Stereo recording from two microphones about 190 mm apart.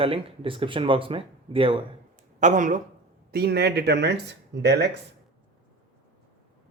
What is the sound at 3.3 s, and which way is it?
Speech, 55° right (ahead or behind).